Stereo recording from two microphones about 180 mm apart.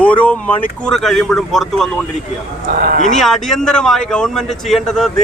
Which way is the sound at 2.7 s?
50° right (ahead or behind).